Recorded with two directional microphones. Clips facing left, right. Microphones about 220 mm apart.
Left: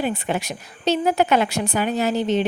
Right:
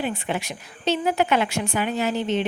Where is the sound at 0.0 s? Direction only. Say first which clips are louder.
Left 3 dB; 40° left (ahead or behind).